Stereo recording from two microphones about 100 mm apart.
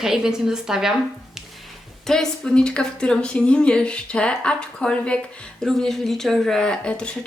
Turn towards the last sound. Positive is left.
turn(degrees=10)  # may be behind; listen again after turning